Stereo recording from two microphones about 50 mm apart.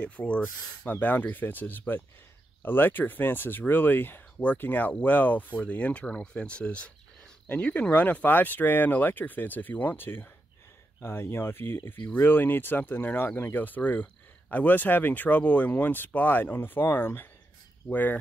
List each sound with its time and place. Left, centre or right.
0.0 s speech: left
7.4 s speech: left